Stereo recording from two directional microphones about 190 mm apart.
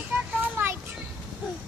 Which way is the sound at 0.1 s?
10° right (ahead or behind).